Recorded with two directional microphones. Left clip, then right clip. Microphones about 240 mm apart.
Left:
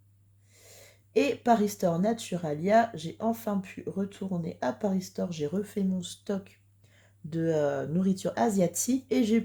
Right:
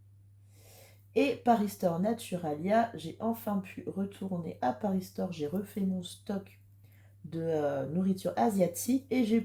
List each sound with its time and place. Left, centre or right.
0.8 s speech: left